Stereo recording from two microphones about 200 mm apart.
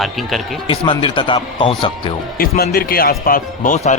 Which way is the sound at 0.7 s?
25° left (ahead or behind).